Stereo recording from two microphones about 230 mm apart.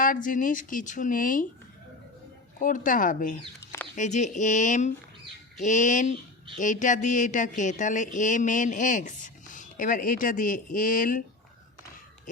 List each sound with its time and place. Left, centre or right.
0.0 s speech: left
2.6 s speech: left
3.6 s a sound: centre
3.9 s speech: left